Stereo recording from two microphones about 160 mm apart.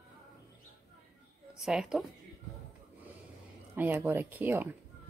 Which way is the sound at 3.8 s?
10° right (ahead or behind).